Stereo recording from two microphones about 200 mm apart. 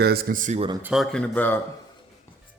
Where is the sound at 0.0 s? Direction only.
50° right (ahead or behind).